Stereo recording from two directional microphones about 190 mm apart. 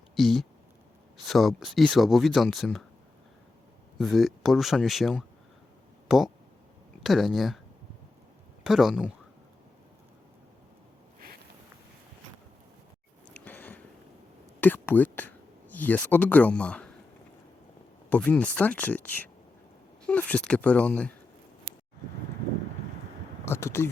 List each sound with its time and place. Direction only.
0.2 s speech: centre (ahead or behind)
3.9 s speech: centre (ahead or behind)
8.6 s speech: centre (ahead or behind)
13.3 s a sound: 10° left (ahead or behind)
14.6 s speech: 10° left (ahead or behind)
18.1 s speech: 5° left (ahead or behind)
23.5 s speech: 15° left (ahead or behind)